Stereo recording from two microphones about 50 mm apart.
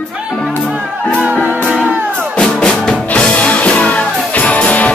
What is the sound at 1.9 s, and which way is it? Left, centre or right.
Music, right.